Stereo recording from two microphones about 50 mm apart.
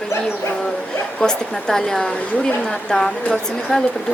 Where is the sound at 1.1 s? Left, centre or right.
Centre.